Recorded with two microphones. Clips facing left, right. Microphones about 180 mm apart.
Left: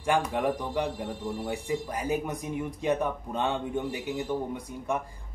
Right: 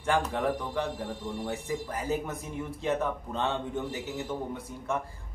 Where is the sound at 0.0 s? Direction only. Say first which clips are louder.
Left 1 dB; 15° left (ahead or behind).